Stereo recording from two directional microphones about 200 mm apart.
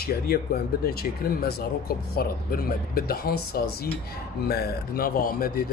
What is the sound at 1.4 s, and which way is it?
Speech, 50° left (ahead or behind).